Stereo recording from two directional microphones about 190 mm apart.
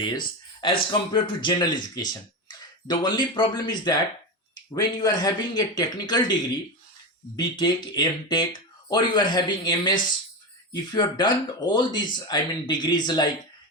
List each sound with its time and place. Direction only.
0.6 s speech: 25° left (ahead or behind)
7.3 s speech: 25° left (ahead or behind)